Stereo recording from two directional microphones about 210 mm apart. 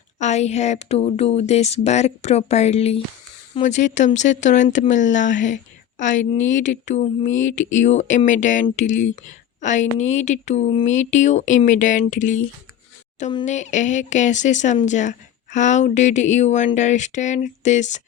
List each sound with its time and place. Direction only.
0.2 s a woman's voice: 30° left (ahead or behind)
13.4 s a woman's voice: 35° left (ahead or behind)